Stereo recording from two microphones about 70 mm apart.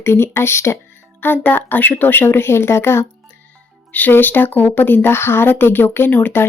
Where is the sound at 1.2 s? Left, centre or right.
Left.